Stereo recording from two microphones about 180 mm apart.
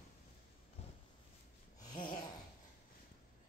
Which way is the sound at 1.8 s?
25° left (ahead or behind).